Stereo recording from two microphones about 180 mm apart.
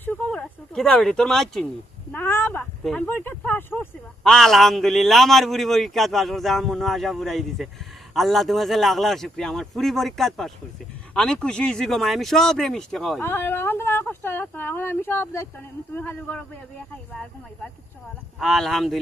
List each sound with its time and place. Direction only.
0.0 s a sound: 10° left (ahead or behind)
2.1 s speech: 10° left (ahead or behind)
18.3 s speech: centre (ahead or behind)